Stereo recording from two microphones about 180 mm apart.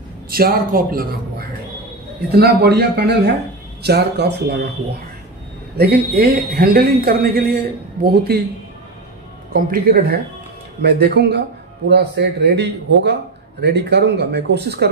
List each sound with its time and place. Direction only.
0.3 s speech: 55° right (ahead or behind)
2.3 s speech: 65° right (ahead or behind)
5.8 s speech: 60° right (ahead or behind)
9.5 s speech: 55° right (ahead or behind)